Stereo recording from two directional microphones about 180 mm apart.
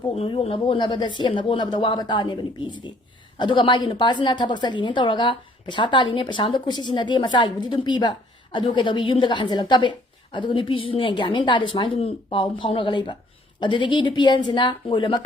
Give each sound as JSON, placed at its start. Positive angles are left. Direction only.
{"t": 0.1, "sound": "a woman's voice", "side_deg": 30}